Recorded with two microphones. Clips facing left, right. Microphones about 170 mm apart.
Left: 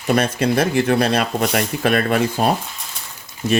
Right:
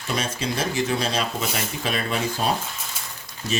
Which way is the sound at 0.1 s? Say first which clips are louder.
Left 9 dB; 60° left (ahead or behind).